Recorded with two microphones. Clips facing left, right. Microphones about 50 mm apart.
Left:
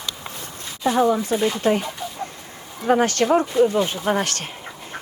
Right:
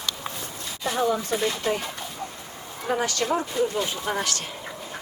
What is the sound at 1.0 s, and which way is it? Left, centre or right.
Speech, left.